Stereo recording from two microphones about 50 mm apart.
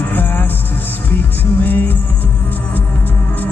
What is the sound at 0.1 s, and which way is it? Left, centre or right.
Music, left.